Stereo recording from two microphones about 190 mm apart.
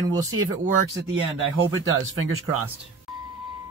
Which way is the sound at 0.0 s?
20° right (ahead or behind).